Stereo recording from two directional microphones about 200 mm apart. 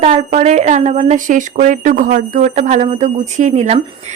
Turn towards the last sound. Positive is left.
turn(degrees=-35)  # may be behind; listen again after turning